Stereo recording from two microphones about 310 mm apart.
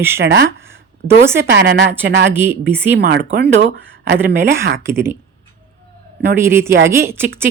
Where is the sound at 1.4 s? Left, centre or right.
Right.